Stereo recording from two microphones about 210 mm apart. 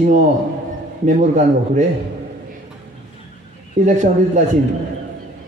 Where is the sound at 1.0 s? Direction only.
35° right (ahead or behind).